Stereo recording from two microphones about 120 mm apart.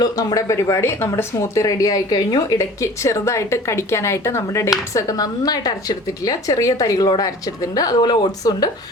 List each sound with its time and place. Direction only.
0.0 s speech: 30° left (ahead or behind)